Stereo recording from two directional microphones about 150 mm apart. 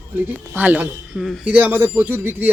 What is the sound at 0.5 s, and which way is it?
A man's voice, 10° right (ahead or behind).